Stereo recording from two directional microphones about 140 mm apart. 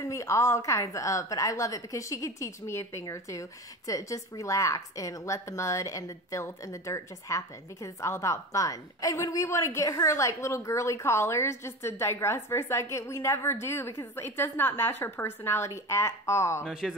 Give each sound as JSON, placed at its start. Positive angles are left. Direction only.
{"t": 0.0, "sound": "a woman's voice", "side_deg": 20}
{"t": 16.6, "sound": "speech", "side_deg": 0}